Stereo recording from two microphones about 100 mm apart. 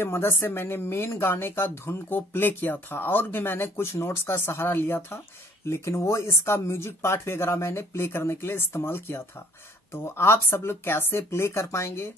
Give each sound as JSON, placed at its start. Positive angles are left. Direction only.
{"t": 0.0, "sound": "speech", "side_deg": 25}